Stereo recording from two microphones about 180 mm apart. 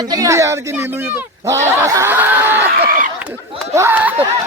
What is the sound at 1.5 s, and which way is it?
Snicker, 15° right (ahead or behind).